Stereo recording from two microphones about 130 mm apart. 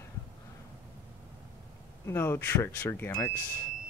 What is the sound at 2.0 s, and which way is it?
Speech, 20° left (ahead or behind).